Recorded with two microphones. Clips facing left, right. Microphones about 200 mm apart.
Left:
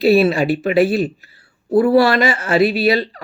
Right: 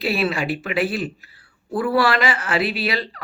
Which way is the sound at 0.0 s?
25° left (ahead or behind).